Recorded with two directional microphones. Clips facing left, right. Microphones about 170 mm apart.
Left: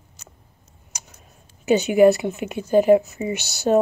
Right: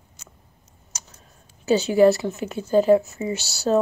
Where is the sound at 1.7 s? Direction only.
15° left (ahead or behind).